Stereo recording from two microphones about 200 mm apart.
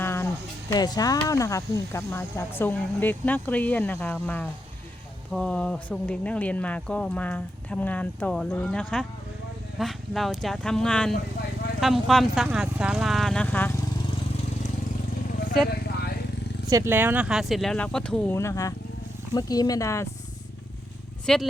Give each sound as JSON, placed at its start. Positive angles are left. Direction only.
{"t": 0.0, "sound": "a sound", "side_deg": 10}
{"t": 0.7, "sound": "speech", "side_deg": 20}
{"t": 16.6, "sound": "speech", "side_deg": -15}
{"t": 21.3, "sound": "speech", "side_deg": 5}